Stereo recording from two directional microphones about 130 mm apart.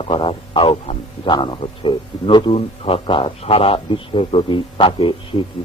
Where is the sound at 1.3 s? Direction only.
40° left (ahead or behind).